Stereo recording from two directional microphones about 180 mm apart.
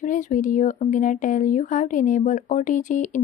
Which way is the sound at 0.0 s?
45° left (ahead or behind).